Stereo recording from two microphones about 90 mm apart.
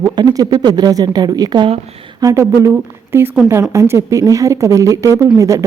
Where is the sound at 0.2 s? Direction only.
45° right (ahead or behind).